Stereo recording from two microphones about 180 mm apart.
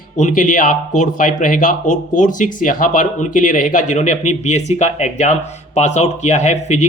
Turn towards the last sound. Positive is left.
turn(degrees=40)  # may be behind; listen again after turning